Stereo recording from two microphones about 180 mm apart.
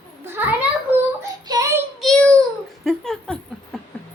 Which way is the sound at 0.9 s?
10° right (ahead or behind).